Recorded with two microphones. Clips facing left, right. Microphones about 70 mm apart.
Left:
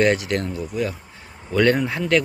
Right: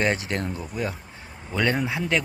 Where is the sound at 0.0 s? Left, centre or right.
Right.